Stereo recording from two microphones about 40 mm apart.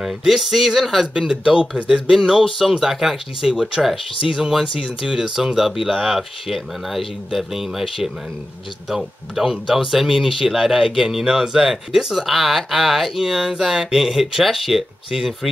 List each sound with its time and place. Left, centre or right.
0.0 s speech: centre
1.3 s speech: right
2.4 s speech: centre